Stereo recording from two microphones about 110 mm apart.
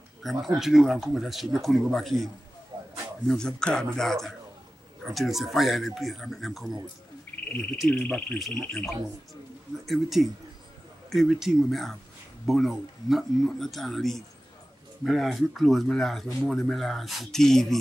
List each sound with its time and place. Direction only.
0.2 s speech: centre (ahead or behind)
2.7 s a sound: 40° right (ahead or behind)
3.3 s speech: 5° left (ahead or behind)
7.9 s speech: 15° left (ahead or behind)